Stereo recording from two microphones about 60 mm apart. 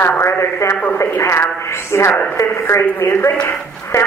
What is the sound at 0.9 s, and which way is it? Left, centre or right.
A woman's voice, left.